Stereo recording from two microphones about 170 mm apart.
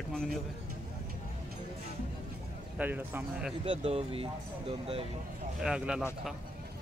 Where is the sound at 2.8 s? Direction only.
10° right (ahead or behind).